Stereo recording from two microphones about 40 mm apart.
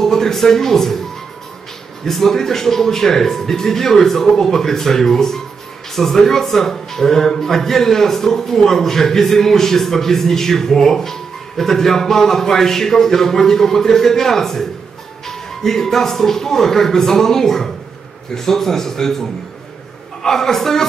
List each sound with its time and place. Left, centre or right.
0.0 s speech: centre
2.0 s a man's voice: centre